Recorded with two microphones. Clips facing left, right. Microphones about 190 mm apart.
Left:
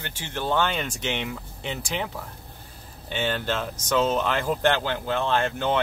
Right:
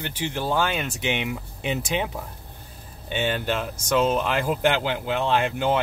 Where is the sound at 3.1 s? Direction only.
15° right (ahead or behind).